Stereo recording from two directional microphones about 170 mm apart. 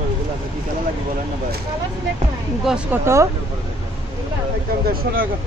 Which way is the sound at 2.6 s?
5° right (ahead or behind).